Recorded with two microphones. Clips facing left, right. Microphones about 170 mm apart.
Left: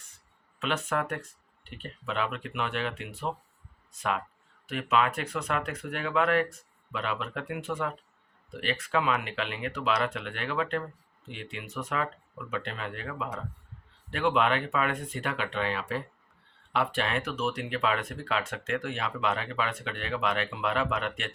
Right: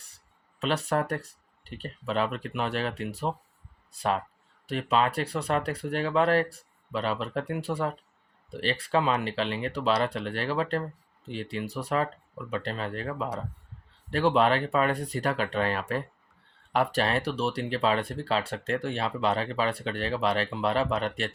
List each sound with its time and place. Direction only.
0.6 s speech: 35° right (ahead or behind)